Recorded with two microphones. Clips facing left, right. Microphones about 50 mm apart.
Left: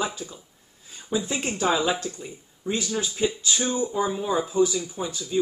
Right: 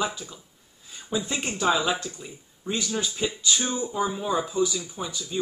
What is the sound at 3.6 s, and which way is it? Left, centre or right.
Speech, left.